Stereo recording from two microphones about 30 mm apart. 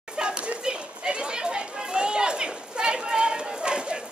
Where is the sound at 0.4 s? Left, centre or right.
Right.